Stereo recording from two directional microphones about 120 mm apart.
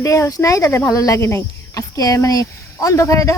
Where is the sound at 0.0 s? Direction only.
25° left (ahead or behind).